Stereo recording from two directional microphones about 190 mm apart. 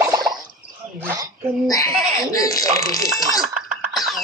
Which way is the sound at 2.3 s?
20° left (ahead or behind).